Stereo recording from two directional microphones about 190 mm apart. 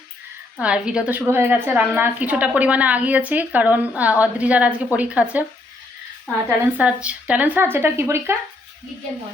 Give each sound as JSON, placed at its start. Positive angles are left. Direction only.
{"t": 0.6, "sound": "a woman's voice", "side_deg": -5}
{"t": 6.7, "sound": "a woman's voice", "side_deg": -5}